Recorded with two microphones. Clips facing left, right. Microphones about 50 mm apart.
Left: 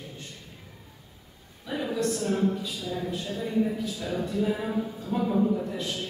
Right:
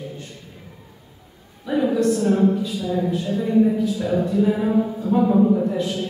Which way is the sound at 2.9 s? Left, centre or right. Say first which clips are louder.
Right 9 dB; right.